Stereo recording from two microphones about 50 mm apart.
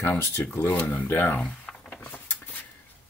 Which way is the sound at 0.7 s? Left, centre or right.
Left.